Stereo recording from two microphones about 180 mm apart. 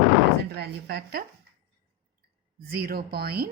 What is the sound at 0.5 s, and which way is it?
Speech, 65° right (ahead or behind).